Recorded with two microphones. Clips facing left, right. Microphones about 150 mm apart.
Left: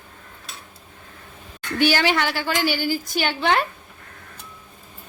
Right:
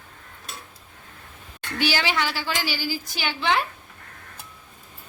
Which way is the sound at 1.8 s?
50° left (ahead or behind).